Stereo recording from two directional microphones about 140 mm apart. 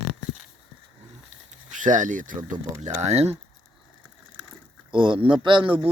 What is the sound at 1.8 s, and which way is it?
Speech, 65° right (ahead or behind).